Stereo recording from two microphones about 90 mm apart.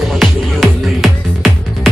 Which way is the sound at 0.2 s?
Centre (ahead or behind).